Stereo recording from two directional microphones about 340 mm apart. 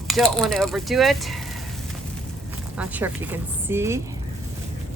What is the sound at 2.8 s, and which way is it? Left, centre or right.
A woman's voice, centre.